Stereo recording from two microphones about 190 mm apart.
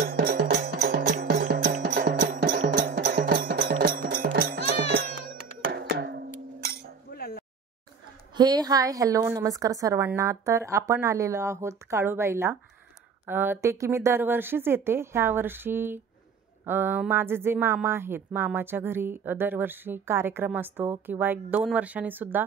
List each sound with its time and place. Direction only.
0.0 s music: 50° right (ahead or behind)
5.7 s wood block: 60° right (ahead or behind)
7.1 s a sound: 55° left (ahead or behind)
8.4 s speech: 20° right (ahead or behind)